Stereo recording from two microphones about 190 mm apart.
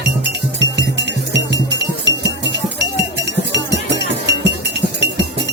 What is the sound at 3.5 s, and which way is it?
Chink, 70° right (ahead or behind).